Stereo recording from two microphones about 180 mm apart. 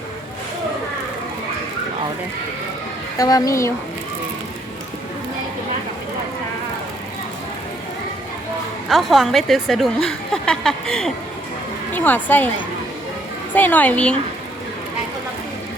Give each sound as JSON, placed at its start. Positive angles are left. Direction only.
{"t": 3.2, "sound": "a woman's voice", "side_deg": 20}
{"t": 8.9, "sound": "a woman's voice", "side_deg": 0}
{"t": 13.5, "sound": "a woman's voice", "side_deg": 10}